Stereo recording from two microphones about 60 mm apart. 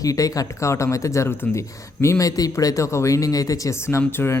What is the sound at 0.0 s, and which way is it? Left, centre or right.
Speech, left.